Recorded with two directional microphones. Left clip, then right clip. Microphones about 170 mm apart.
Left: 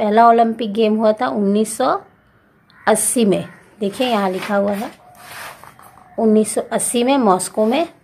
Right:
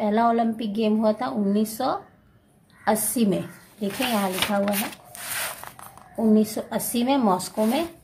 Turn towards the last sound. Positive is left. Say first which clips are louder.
# left 7 dB
turn(degrees=15)  # may be behind; listen again after turning